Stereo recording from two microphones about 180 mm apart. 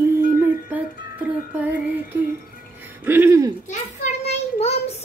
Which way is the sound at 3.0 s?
10° right (ahead or behind).